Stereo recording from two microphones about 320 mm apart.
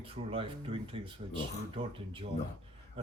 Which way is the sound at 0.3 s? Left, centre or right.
Centre.